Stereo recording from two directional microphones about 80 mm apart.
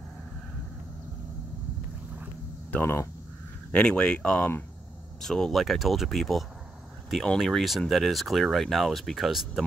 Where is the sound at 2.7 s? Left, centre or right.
Left.